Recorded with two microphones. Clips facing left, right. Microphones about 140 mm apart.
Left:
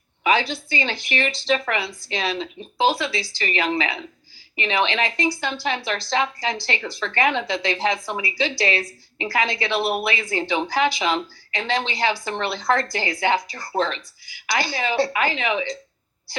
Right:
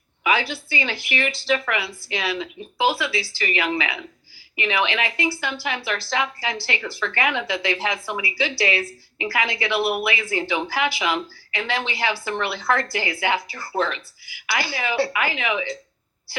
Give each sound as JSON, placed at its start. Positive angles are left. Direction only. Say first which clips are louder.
{"t": 0.5, "sound": "a woman's voice", "louder": "left 1 dB", "side_deg": 30}